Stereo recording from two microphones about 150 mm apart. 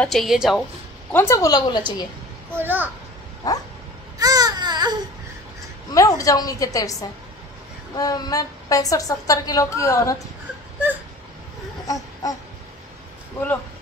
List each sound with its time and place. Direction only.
0.0 s speech: centre (ahead or behind)
1.1 s a woman's voice: 20° left (ahead or behind)
2.5 s a child's voice: 10° right (ahead or behind)
3.4 s a woman's voice: 25° left (ahead or behind)
4.2 s baby cry: 25° right (ahead or behind)
5.9 s a woman's voice: 20° left (ahead or behind)
11.9 s baby cry: 25° left (ahead or behind)